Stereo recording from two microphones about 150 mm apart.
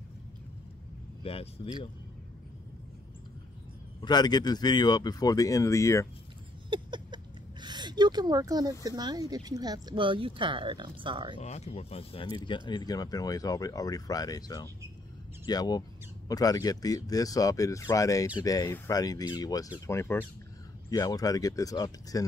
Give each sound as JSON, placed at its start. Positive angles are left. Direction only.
{"t": 1.2, "sound": "speech", "side_deg": 40}
{"t": 4.0, "sound": "speech", "side_deg": 30}
{"t": 6.7, "sound": "a sound", "side_deg": -30}
{"t": 7.6, "sound": "speech", "side_deg": -30}
{"t": 11.3, "sound": "speech", "side_deg": 50}